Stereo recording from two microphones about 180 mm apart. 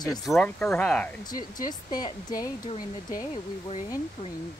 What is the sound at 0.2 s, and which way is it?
Speech, centre (ahead or behind).